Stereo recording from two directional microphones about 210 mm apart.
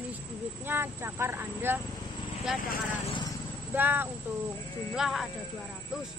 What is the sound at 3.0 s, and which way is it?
Speech, 20° left (ahead or behind).